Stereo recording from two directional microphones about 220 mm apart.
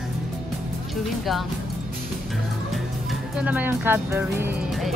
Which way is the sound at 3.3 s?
5° right (ahead or behind).